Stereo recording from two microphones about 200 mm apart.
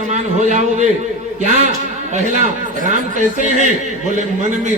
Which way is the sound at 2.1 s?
35° right (ahead or behind).